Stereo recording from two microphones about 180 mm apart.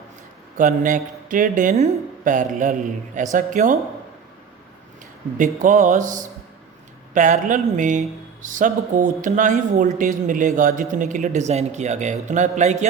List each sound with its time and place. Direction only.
0.5 s speech: 45° right (ahead or behind)
5.4 s speech: 45° right (ahead or behind)